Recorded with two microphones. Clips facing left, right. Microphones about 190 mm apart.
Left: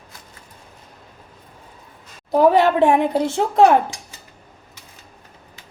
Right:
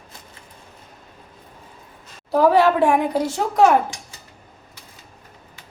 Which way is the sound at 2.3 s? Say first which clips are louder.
Left 1 dB; 20° left (ahead or behind).